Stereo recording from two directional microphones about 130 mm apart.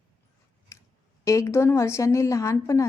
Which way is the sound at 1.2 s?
25° left (ahead or behind).